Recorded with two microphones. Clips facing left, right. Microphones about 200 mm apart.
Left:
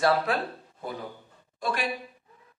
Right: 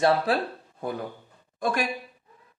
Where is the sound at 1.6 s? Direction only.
45° right (ahead or behind).